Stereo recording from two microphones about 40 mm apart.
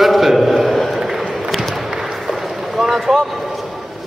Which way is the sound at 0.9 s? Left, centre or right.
Centre.